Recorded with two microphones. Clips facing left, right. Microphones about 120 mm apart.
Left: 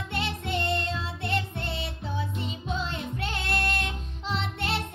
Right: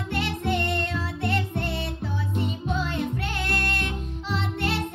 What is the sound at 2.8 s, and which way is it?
Music, 25° left (ahead or behind).